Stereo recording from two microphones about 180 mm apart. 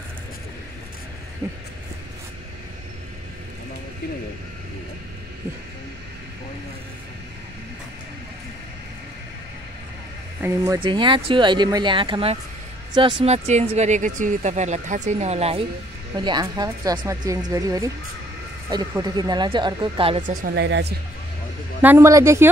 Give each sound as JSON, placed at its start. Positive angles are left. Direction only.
{"t": 10.4, "sound": "speech", "side_deg": -15}
{"t": 10.8, "sound": "speech", "side_deg": -25}
{"t": 16.2, "sound": "speech", "side_deg": -25}
{"t": 20.2, "sound": "speech", "side_deg": -60}
{"t": 21.8, "sound": "speech", "side_deg": -15}